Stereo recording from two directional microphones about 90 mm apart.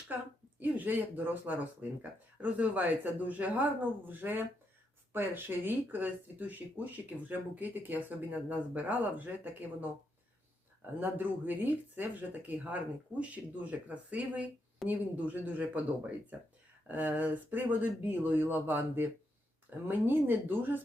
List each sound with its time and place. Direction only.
0.6 s speech: 20° right (ahead or behind)
11.0 s speech: 20° right (ahead or behind)